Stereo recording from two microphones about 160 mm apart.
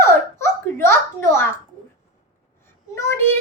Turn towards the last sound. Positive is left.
turn(degrees=15)  # may be behind; listen again after turning